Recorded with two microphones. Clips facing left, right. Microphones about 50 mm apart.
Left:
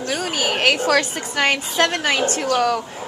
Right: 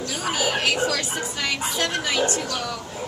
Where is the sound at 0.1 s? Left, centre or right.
Left.